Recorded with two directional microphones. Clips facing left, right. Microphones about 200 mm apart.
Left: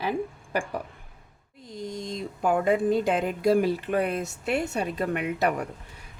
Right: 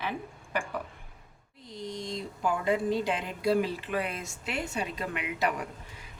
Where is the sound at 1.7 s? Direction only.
50° left (ahead or behind).